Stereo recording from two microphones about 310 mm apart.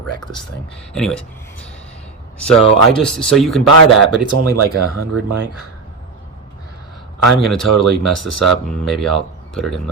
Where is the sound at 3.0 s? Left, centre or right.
Centre.